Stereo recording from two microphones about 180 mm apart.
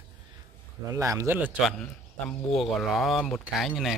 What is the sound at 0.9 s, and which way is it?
Speech, 15° right (ahead or behind).